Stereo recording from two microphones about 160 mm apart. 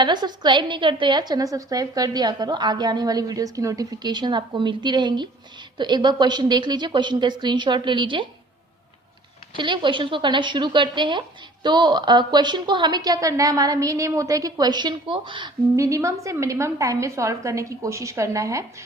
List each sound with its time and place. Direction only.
0.0 s a woman's voice: 25° right (ahead or behind)
9.6 s a woman's voice: 30° right (ahead or behind)